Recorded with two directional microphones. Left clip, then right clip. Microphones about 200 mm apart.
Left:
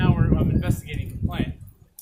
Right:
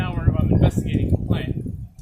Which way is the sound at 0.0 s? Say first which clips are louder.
Left 3 dB; 5° left (ahead or behind).